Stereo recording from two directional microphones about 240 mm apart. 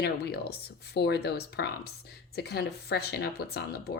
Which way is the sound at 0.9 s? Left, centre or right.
Left.